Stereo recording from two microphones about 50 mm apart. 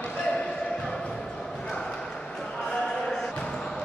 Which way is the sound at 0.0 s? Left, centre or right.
Left.